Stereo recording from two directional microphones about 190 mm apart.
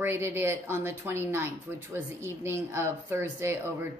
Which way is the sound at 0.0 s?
10° right (ahead or behind).